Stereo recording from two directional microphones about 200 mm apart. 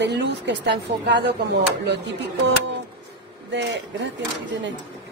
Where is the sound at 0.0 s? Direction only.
60° right (ahead or behind).